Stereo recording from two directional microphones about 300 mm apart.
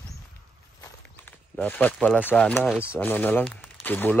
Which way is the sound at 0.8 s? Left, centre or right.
Centre.